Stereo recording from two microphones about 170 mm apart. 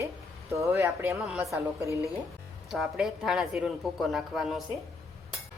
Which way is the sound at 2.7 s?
Centre (ahead or behind).